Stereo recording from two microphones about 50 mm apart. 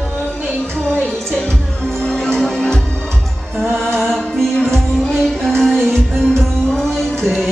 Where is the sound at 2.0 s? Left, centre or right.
Centre.